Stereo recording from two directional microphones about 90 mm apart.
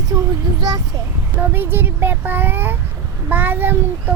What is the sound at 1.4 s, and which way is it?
Speech, 20° right (ahead or behind).